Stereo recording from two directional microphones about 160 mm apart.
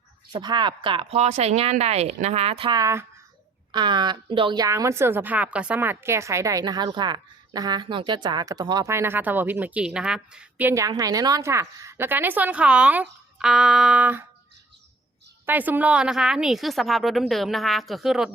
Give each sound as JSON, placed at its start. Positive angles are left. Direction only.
{"t": 0.3, "sound": "speech", "side_deg": -30}
{"t": 3.7, "sound": "a woman's voice", "side_deg": -30}
{"t": 15.4, "sound": "a woman's voice", "side_deg": -10}